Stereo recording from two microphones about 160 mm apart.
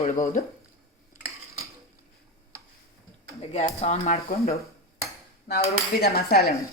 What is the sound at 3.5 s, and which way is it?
Speech, 45° left (ahead or behind).